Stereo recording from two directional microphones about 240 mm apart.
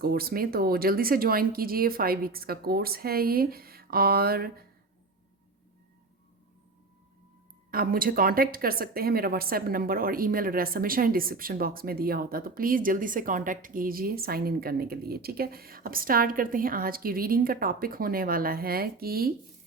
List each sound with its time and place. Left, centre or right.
0.0 s speech: right
7.7 s speech: right